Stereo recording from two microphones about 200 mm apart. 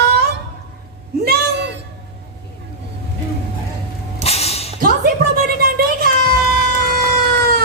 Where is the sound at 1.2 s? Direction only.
50° right (ahead or behind).